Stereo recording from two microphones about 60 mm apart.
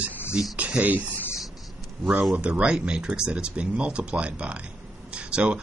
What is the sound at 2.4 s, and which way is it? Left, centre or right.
Speech, centre.